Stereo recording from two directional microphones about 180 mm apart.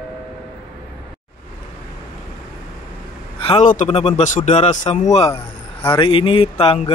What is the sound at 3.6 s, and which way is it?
Speech, 45° left (ahead or behind).